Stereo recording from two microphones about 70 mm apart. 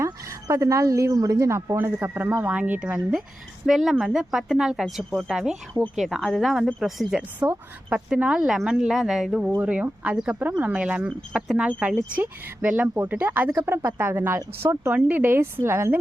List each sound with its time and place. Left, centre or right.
0.0 s a woman's voice: right
2.0 s speech: right
3.7 s speech: centre
7.2 s speech: right; by 9.5 s centre
9.6 s speech: right
14.9 s speech: centre
15.2 s speech: right